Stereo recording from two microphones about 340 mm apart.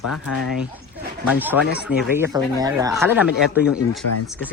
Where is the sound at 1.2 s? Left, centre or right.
Centre.